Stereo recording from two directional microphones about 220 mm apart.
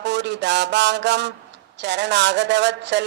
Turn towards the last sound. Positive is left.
turn(degrees=-50)  # may be behind; listen again after turning